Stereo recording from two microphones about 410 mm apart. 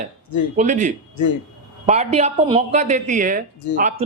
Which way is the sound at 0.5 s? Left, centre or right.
Centre.